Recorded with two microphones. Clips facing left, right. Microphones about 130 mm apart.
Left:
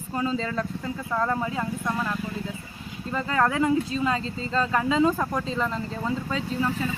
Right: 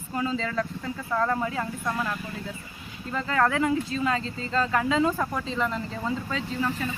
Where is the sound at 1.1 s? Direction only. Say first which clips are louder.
Even; 10° left (ahead or behind).